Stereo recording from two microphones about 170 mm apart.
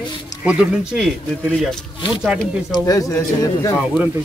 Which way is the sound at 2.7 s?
20° left (ahead or behind).